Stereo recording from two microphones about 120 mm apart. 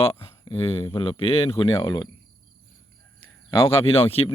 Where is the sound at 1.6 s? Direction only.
35° left (ahead or behind).